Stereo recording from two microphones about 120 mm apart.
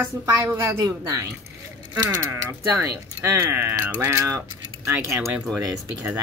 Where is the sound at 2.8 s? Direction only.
20° right (ahead or behind).